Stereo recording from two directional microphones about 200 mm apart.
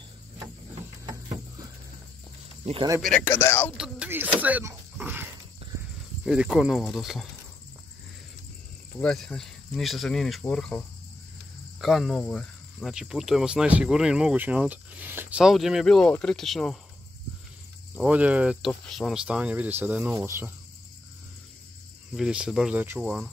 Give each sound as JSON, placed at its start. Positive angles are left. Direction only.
{"t": 2.6, "sound": "speech", "side_deg": -30}
{"t": 3.0, "sound": "speech", "side_deg": 5}
{"t": 3.7, "sound": "a sound", "side_deg": -5}
{"t": 6.2, "sound": "speech", "side_deg": -5}
{"t": 9.0, "sound": "speech", "side_deg": 5}
{"t": 11.8, "sound": "speech", "side_deg": 0}
{"t": 17.9, "sound": "speech", "side_deg": -5}
{"t": 22.1, "sound": "speech", "side_deg": -5}